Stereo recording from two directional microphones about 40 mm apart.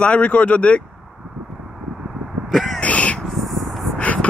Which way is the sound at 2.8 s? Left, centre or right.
Left.